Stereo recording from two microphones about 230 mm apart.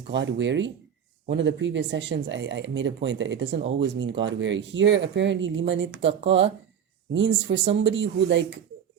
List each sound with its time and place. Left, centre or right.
0.1 s speech: right